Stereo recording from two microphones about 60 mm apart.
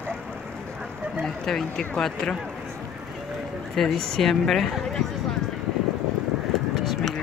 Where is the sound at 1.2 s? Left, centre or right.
Centre.